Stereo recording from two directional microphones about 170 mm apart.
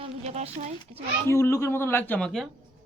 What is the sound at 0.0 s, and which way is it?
Speech, 40° right (ahead or behind).